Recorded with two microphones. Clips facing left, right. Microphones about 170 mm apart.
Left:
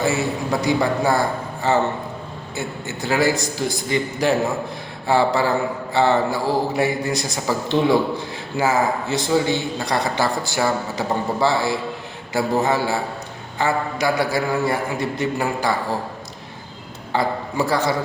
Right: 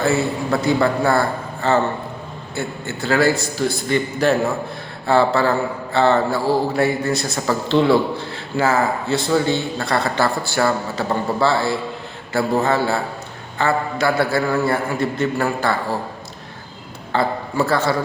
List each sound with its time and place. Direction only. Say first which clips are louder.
0.0 s speech: right 2 dB; 15° left (ahead or behind)
17.1 s a man's voice: right 1 dB; 15° left (ahead or behind)